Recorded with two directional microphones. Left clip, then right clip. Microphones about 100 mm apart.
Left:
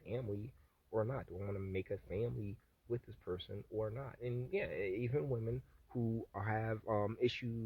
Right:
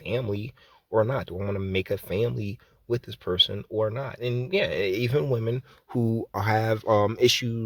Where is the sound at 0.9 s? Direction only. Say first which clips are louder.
Right 15 dB; 25° right (ahead or behind).